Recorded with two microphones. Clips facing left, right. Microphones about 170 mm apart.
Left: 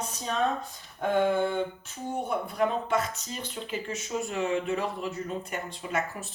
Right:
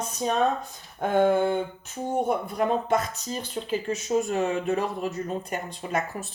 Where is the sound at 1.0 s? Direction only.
45° right (ahead or behind).